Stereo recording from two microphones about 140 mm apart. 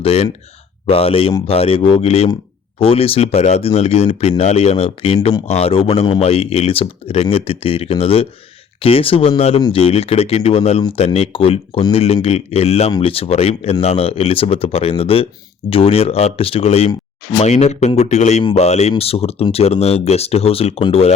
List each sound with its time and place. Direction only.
0.0 s speech: 45° left (ahead or behind)